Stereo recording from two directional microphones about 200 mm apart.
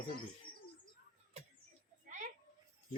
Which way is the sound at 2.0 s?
35° right (ahead or behind).